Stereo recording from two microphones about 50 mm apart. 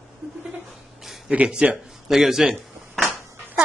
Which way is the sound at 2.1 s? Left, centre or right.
Centre.